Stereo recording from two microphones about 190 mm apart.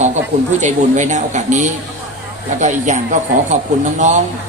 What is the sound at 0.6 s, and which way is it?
Speech, 40° right (ahead or behind).